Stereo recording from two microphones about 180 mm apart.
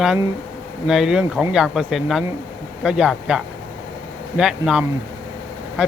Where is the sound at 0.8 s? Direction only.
Centre (ahead or behind).